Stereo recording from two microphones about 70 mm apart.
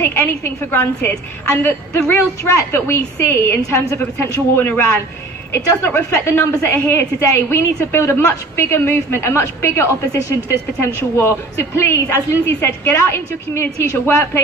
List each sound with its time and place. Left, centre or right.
0.0 s a woman's voice: left
2.4 s a woman's voice: left
5.9 s a woman's voice: left
6.2 s a woman's voice: left